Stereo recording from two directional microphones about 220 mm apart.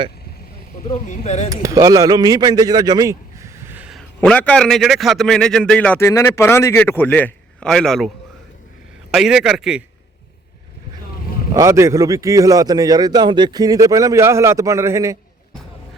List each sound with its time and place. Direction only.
1.0 s speech: 30° left (ahead or behind)
1.6 s a man's voice: 15° right (ahead or behind); by 8.1 s centre (ahead or behind)
9.1 s a man's voice: centre (ahead or behind)
11.5 s a man's voice: 15° right (ahead or behind)